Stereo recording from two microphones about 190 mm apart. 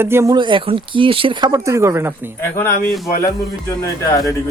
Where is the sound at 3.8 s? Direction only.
15° left (ahead or behind).